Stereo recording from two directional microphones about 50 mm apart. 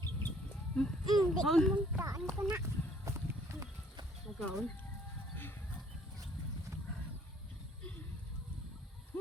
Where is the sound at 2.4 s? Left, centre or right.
Right.